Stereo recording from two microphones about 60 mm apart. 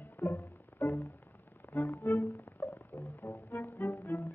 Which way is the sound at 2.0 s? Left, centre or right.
Left.